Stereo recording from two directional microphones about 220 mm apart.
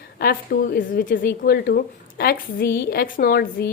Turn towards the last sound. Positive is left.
turn(degrees=45)  # may be behind; listen again after turning